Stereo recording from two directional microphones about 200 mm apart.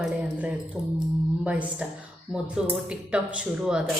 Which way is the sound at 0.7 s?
5° right (ahead or behind).